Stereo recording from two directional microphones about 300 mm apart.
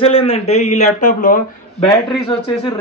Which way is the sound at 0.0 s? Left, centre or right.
Centre.